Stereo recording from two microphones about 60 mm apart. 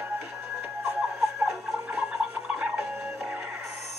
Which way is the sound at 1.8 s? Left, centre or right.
Right.